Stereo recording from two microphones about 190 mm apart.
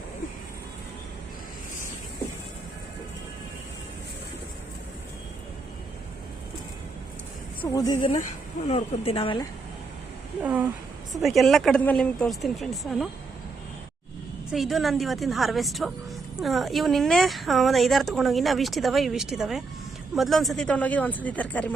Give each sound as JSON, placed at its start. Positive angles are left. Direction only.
{"t": 7.6, "sound": "speech", "side_deg": 20}
{"t": 8.6, "sound": "speech", "side_deg": 30}
{"t": 10.4, "sound": "a woman's voice", "side_deg": -10}
{"t": 14.5, "sound": "a woman's voice", "side_deg": 0}